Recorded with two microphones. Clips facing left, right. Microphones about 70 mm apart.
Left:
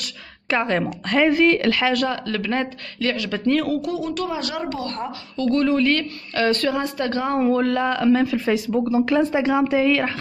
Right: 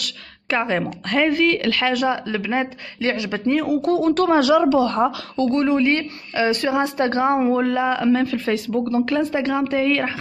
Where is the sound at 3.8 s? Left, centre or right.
Right.